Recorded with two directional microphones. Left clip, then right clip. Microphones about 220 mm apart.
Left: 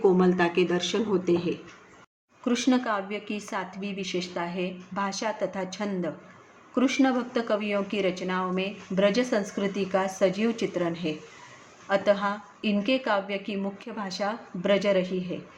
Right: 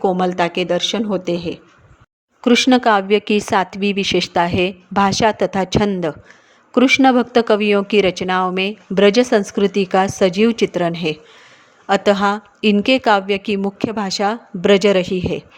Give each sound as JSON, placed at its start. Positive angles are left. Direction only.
{"t": 0.0, "sound": "speech", "side_deg": -45}